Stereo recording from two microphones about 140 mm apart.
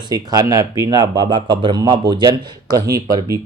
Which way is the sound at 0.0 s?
30° right (ahead or behind).